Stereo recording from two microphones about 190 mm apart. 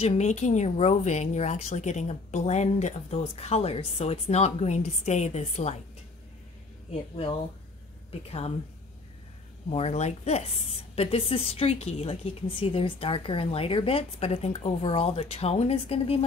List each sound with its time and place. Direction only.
0.0 s a woman's voice: 35° left (ahead or behind)
8.3 s a woman's voice: 35° left (ahead or behind)
9.7 s a woman's voice: 35° left (ahead or behind)